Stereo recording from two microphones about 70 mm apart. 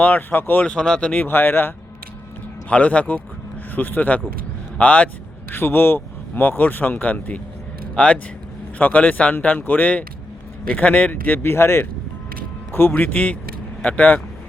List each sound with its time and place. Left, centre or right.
0.0 s speech: left
0.7 s speech: centre
1.1 s speech: left
2.6 s speech: centre
5.5 s speech: left
12.9 s speech: left